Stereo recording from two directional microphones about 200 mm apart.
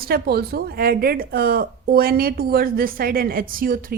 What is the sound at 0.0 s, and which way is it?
A woman's voice, 50° right (ahead or behind).